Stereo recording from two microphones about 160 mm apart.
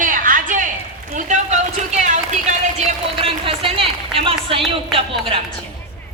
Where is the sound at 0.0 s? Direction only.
55° right (ahead or behind).